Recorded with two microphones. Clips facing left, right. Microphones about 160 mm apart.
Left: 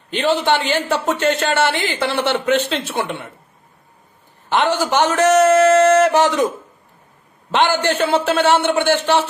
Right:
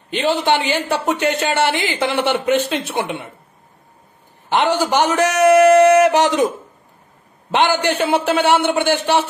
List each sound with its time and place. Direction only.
0.1 s a man's voice: 15° right (ahead or behind)
4.5 s a man's voice: 15° right (ahead or behind)
7.5 s a man's voice: 15° right (ahead or behind)